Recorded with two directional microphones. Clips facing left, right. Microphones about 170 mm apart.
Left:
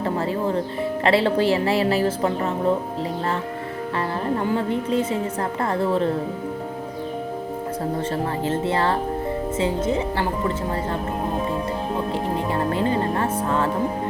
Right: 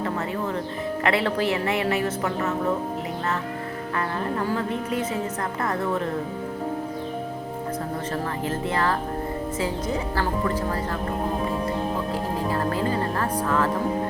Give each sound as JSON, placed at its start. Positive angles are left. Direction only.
{"t": 1.0, "sound": "a woman's voice", "side_deg": 30}
{"t": 3.9, "sound": "a woman's voice", "side_deg": 30}
{"t": 8.1, "sound": "a woman's voice", "side_deg": 30}
{"t": 12.5, "sound": "speech", "side_deg": 25}